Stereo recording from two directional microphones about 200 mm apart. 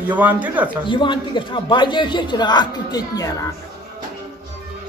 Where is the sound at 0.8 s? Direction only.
25° left (ahead or behind).